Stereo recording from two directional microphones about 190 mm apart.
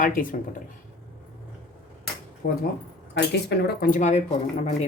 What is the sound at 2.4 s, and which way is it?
Speech, 60° left (ahead or behind).